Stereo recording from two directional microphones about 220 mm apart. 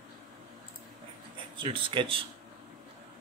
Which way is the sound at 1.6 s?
25° right (ahead or behind).